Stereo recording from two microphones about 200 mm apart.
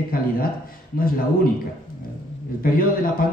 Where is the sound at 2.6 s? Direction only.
45° left (ahead or behind).